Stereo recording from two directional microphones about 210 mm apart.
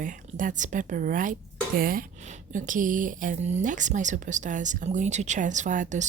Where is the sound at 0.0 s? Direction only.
40° right (ahead or behind).